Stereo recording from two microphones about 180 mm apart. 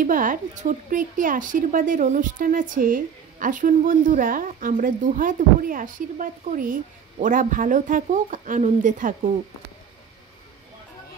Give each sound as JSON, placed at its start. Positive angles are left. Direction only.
{"t": 0.0, "sound": "a woman's voice", "side_deg": -45}